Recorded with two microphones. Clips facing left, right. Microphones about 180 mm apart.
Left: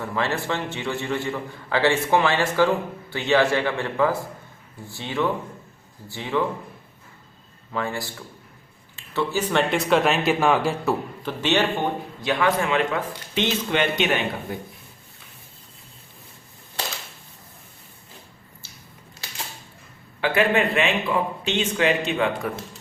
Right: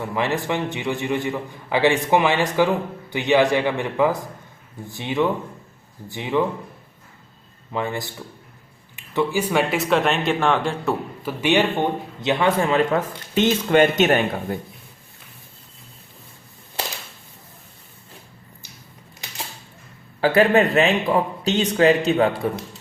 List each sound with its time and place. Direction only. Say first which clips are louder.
0.0 s a man's voice: right 2 dB; 15° right (ahead or behind)
7.7 s a man's voice: right 2 dB; 20° right (ahead or behind); by 10.9 s 5° left (ahead or behind)
11.2 s a man's voice: right 6 dB; 10° right (ahead or behind); by 14.3 s 45° right (ahead or behind)
20.2 s a man's voice: right 5 dB; 35° right (ahead or behind)